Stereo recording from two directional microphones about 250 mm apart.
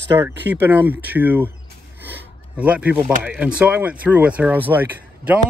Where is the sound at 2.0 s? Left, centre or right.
Centre.